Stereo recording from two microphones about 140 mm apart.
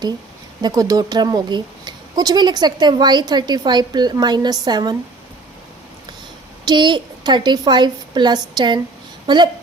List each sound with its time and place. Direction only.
0.6 s speech: 25° right (ahead or behind)
6.7 s speech: 35° right (ahead or behind)